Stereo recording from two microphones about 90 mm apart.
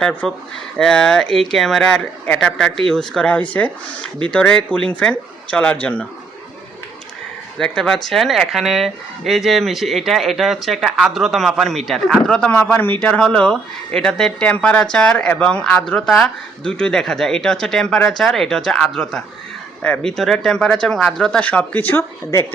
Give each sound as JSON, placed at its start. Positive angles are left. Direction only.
{"t": 0.2, "sound": "speech", "side_deg": 5}
{"t": 7.6, "sound": "speech", "side_deg": 5}
{"t": 22.3, "sound": "speech", "side_deg": 30}